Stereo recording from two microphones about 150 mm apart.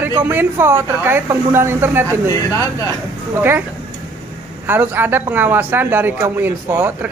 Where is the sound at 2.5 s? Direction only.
20° left (ahead or behind).